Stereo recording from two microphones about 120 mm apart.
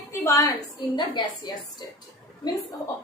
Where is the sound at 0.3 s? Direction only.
30° left (ahead or behind).